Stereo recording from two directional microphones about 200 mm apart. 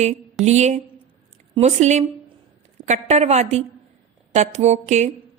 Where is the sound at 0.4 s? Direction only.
35° right (ahead or behind).